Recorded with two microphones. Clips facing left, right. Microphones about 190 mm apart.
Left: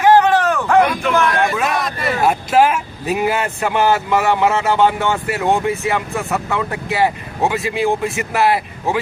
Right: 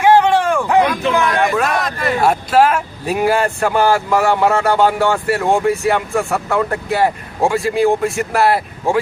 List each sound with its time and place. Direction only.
0.0 s a sound: 10° right (ahead or behind)
1.1 s speech: 15° right (ahead or behind)
1.5 s speech: 5° left (ahead or behind)